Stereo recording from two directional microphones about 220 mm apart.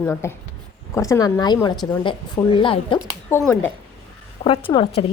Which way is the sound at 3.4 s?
10° left (ahead or behind).